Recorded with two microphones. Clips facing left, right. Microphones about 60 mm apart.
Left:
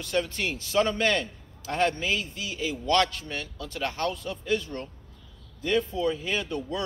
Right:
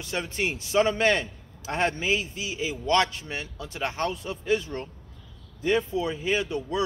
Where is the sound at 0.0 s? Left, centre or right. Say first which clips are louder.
Left 1 dB; centre.